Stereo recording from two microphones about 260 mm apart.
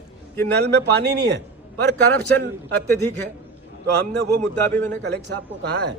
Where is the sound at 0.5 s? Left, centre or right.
Right.